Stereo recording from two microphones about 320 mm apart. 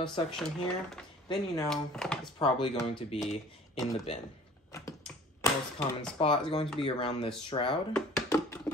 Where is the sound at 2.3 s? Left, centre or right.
Centre.